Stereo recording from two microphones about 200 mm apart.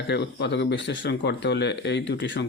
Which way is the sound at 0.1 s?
60° left (ahead or behind).